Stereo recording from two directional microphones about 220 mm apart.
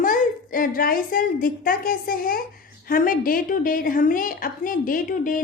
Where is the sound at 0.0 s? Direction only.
40° left (ahead or behind).